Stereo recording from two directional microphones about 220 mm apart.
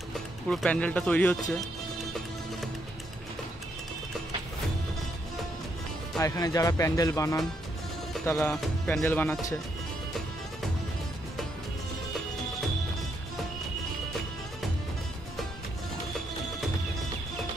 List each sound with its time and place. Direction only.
0.5 s speech: 5° left (ahead or behind)
6.2 s speech: 15° left (ahead or behind)